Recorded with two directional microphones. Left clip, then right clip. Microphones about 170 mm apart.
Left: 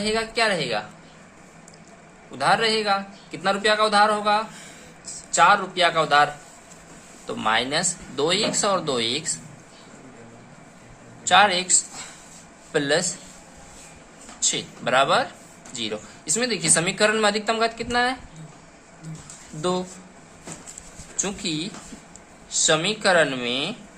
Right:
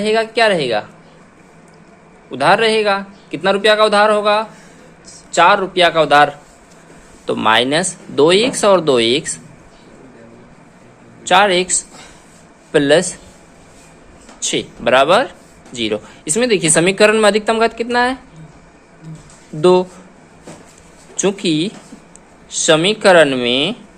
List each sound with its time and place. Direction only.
0.0 s a man's voice: 45° right (ahead or behind)
2.3 s a man's voice: 50° right (ahead or behind)
11.3 s speech: 40° right (ahead or behind)
12.7 s speech: 40° right (ahead or behind)
14.5 s speech: 40° right (ahead or behind)
21.2 s a man's voice: 45° right (ahead or behind)